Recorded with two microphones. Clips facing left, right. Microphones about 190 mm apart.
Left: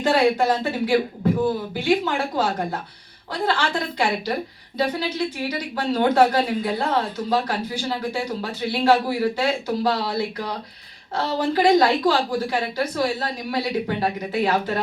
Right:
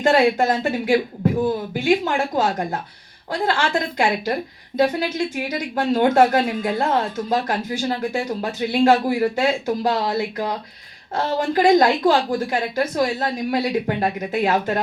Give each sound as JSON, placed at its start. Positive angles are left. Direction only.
{"t": 0.0, "sound": "speech", "side_deg": -50}